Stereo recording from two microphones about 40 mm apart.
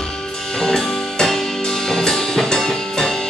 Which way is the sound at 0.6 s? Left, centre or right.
Centre.